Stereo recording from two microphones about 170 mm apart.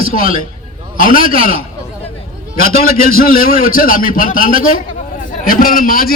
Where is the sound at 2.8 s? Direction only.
60° left (ahead or behind).